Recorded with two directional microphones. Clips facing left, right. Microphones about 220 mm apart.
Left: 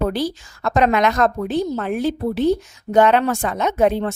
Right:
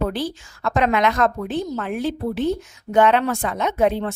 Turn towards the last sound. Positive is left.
turn(degrees=45)  # may be behind; listen again after turning